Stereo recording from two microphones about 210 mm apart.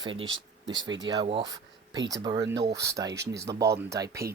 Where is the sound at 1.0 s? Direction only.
20° right (ahead or behind).